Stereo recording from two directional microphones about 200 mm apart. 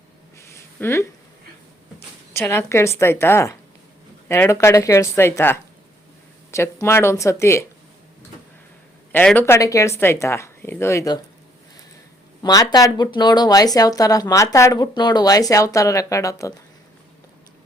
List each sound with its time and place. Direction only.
0.3 s a sound: 15° left (ahead or behind)
2.3 s speech: 10° left (ahead or behind)
9.1 s speech: 10° left (ahead or behind)
12.4 s speech: 20° left (ahead or behind)